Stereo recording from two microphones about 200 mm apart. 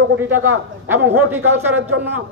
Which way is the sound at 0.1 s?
85° right.